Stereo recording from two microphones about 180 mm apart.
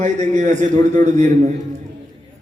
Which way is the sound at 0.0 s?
40° right (ahead or behind).